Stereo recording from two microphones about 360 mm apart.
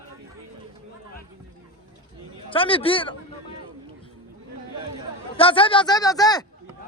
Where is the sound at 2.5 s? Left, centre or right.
Centre.